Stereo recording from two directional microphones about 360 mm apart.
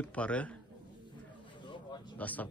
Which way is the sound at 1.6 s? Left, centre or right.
Centre.